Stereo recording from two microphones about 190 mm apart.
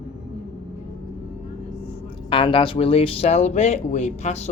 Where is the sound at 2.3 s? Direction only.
25° left (ahead or behind).